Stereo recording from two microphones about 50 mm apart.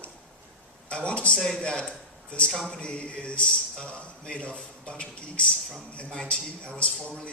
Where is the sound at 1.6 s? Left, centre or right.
Centre.